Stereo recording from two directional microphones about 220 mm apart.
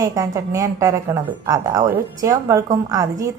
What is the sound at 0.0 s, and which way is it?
A woman's voice, 15° right (ahead or behind).